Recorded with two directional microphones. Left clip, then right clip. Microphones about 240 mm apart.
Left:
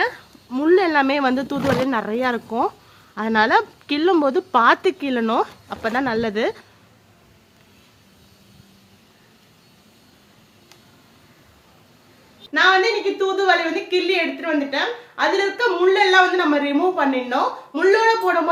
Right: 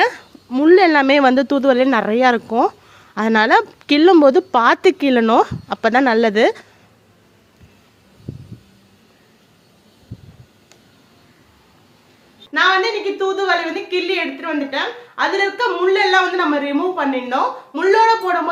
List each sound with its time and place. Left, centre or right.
0.0 s speech: right
12.5 s a woman's voice: centre